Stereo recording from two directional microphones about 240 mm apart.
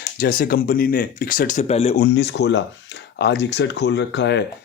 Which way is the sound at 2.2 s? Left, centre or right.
Left.